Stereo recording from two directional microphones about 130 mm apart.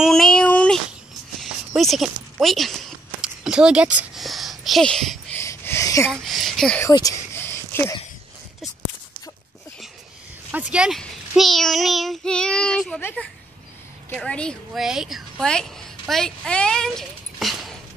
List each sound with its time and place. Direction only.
0.0 s a sound: 5° left (ahead or behind)
2.4 s speech: centre (ahead or behind)
5.3 s a sound: 20° left (ahead or behind)
6.2 s child singing: centre (ahead or behind)
6.9 s speech: 30° left (ahead or behind)
7.3 s a sound: 15° left (ahead or behind)
10.5 s speech: 10° right (ahead or behind)
11.0 s child singing: centre (ahead or behind)
14.1 s a woman's voice: 10° left (ahead or behind)